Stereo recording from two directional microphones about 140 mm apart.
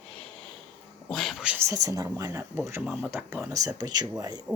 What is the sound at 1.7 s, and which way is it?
Speech, 25° right (ahead or behind).